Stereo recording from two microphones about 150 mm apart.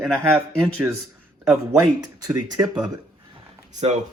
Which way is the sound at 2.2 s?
25° right (ahead or behind).